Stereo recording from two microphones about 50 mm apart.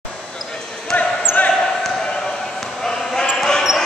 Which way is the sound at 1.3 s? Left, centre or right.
Centre.